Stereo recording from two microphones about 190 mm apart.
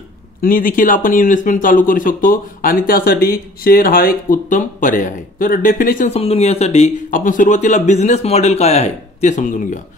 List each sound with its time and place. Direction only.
0.4 s speech: 45° left (ahead or behind)